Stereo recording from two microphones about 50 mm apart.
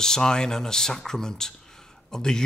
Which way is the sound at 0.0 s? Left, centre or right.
Centre.